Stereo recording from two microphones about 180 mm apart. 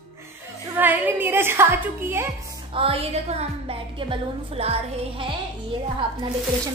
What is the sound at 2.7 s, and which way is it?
Music, 30° right (ahead or behind).